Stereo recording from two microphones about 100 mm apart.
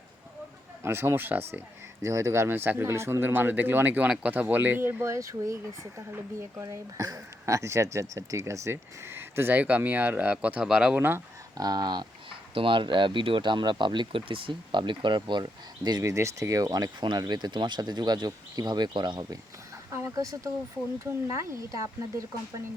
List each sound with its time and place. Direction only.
0.8 s speech: 25° right (ahead or behind)
2.0 s speech: 30° right (ahead or behind)
6.6 s speech: 35° right (ahead or behind); by 11.0 s 5° right (ahead or behind)
11.5 s speech: 40° right (ahead or behind)
16.1 s speech: 30° right (ahead or behind)
17.0 s speech: 45° right (ahead or behind)
19.9 s fowl: 25° right (ahead or behind)
20.1 s speech: 35° right (ahead or behind)